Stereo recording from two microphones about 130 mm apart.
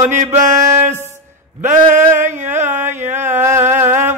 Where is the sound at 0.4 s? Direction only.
20° right (ahead or behind).